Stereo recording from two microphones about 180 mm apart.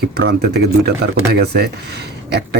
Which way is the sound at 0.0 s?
65° right (ahead or behind).